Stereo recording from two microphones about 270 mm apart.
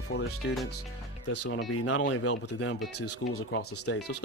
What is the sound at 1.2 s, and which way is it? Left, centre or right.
Speech, left.